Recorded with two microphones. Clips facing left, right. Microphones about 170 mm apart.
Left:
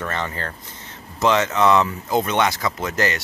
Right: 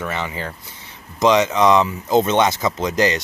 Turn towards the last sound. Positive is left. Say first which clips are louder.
# right 4 dB
turn(degrees=-20)  # may be behind; listen again after turning